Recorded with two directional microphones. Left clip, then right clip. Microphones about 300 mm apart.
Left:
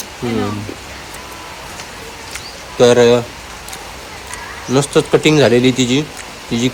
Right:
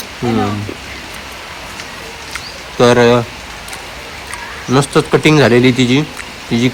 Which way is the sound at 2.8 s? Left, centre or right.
Right.